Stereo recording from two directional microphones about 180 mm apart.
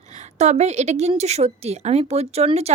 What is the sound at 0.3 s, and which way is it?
Speech, 40° right (ahead or behind).